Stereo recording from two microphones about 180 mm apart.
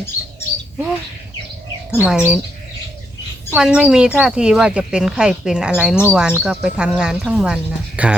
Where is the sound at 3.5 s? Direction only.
5° right (ahead or behind).